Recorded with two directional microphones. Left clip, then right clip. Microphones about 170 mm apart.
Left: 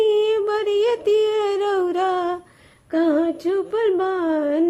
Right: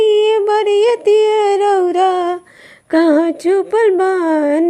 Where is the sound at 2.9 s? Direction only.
45° right (ahead or behind).